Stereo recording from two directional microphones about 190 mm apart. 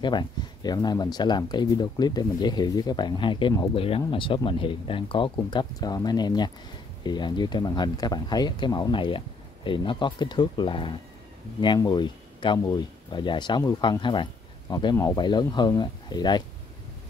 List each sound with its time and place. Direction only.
0.0 s speech: 25° left (ahead or behind)